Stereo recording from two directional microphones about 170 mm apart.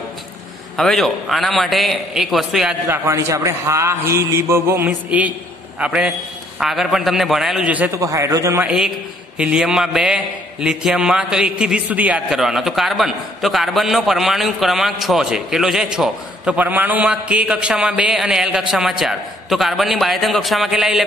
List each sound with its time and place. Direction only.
0.7 s a man's voice: centre (ahead or behind)
2.9 s a man's voice: 15° right (ahead or behind)
8.6 s a man's voice: 5° right (ahead or behind)